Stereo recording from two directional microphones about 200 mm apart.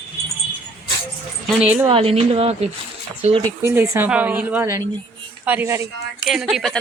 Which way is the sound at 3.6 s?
10° right (ahead or behind).